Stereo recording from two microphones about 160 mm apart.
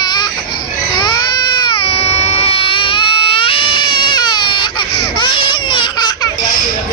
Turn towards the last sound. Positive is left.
turn(degrees=30)  # may be behind; listen again after turning